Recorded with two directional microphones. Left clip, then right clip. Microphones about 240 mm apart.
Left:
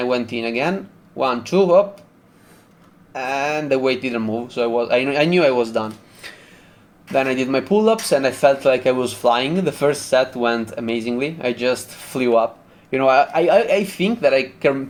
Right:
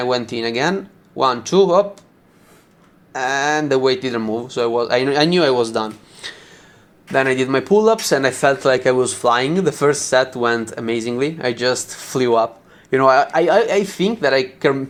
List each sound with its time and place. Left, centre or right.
0.3 s speech: right
3.1 s speech: right